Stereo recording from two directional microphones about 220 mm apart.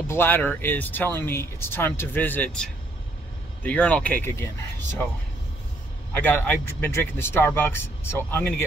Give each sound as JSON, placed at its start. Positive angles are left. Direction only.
{"t": 0.1, "sound": "speech", "side_deg": 10}
{"t": 6.1, "sound": "speech", "side_deg": 10}